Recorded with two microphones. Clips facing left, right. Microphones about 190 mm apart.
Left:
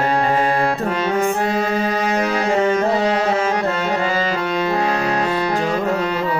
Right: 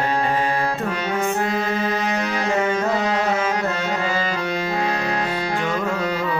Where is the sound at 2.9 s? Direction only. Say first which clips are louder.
Left 3 dB; 35° left (ahead or behind).